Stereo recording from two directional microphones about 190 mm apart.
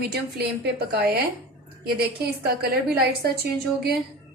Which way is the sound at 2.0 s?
55° right (ahead or behind).